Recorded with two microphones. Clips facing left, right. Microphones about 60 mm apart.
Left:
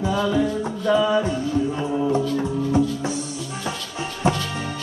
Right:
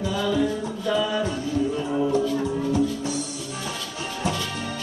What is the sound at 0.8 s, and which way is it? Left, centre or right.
Music, centre.